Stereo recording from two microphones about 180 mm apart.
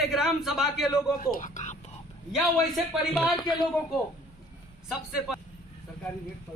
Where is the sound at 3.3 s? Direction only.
25° left (ahead or behind).